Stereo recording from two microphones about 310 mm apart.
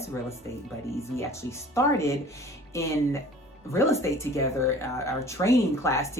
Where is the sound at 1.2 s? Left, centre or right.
Centre.